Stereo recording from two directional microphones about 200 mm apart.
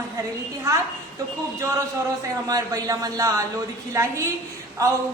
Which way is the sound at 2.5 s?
20° right (ahead or behind).